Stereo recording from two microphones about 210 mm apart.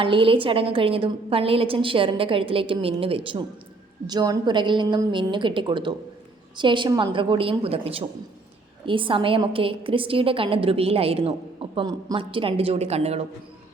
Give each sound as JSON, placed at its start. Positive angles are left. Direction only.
{"t": 0.0, "sound": "a woman's voice", "side_deg": -25}